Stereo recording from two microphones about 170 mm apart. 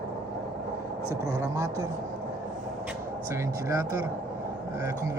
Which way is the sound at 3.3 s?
15° right (ahead or behind).